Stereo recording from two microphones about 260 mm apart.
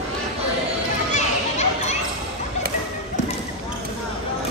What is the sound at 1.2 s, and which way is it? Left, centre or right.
Children playing, left.